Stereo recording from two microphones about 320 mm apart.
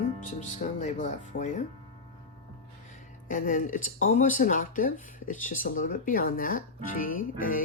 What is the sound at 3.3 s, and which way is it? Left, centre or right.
Speech, left.